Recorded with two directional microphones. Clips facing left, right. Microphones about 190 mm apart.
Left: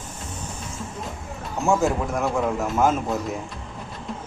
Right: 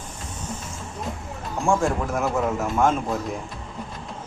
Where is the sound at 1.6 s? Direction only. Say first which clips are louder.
Left 1 dB; 5° left (ahead or behind).